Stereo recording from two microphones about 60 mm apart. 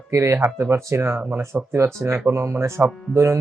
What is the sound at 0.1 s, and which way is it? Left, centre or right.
Speech, right.